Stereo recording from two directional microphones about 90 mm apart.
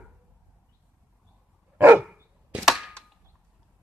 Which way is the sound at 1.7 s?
20° right (ahead or behind).